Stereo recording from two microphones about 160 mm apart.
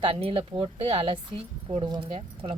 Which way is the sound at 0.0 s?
35° right (ahead or behind).